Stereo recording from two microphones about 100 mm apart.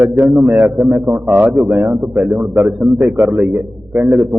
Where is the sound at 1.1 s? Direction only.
15° right (ahead or behind).